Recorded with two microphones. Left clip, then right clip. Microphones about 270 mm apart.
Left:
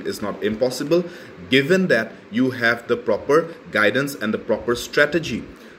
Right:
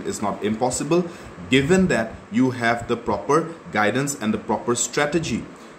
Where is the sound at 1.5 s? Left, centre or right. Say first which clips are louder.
Left 2 dB; centre.